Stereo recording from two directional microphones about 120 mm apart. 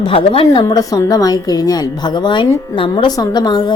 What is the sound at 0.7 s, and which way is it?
A woman's voice, 30° left (ahead or behind).